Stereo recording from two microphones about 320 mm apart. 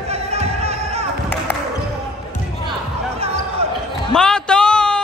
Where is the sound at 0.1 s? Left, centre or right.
Centre.